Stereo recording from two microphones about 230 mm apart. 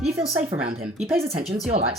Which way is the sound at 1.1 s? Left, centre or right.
Right.